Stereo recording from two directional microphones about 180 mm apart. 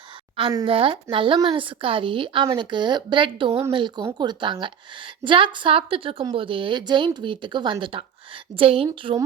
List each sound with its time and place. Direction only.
0.3 s a woman's voice: 25° right (ahead or behind)